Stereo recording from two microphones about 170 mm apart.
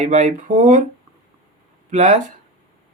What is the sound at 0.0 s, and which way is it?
Speech, 45° right (ahead or behind).